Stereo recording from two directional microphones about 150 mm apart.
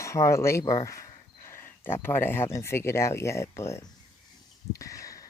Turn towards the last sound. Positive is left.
turn(degrees=20)  # may be behind; listen again after turning